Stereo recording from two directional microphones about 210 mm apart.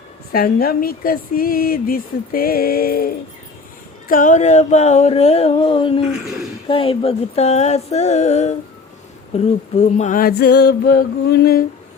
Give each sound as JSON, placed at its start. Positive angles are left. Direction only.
{"t": 0.3, "sound": "speech", "side_deg": 45}
{"t": 4.1, "sound": "a sound", "side_deg": 35}
{"t": 9.3, "sound": "speech", "side_deg": 30}